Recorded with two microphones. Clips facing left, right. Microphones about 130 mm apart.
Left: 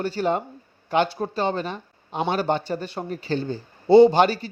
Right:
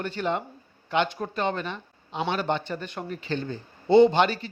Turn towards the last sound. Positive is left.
turn(degrees=40)  # may be behind; listen again after turning